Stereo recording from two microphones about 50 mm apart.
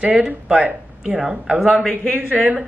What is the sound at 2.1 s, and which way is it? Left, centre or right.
Speech, right.